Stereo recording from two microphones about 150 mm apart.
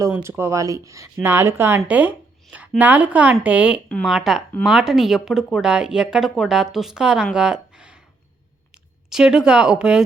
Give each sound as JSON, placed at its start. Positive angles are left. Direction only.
{"t": 0.0, "sound": "speech", "side_deg": -20}
{"t": 3.8, "sound": "speech", "side_deg": 5}
{"t": 7.3, "sound": "a sound", "side_deg": -5}
{"t": 9.0, "sound": "speech", "side_deg": -5}